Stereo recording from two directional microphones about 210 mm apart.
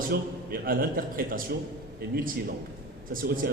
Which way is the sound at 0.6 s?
45° right (ahead or behind).